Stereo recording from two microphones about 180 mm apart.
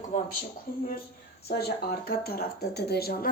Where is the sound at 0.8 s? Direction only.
55° left (ahead or behind).